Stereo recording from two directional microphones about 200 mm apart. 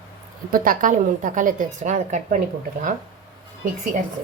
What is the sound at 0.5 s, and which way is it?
A woman's voice, 45° right (ahead or behind).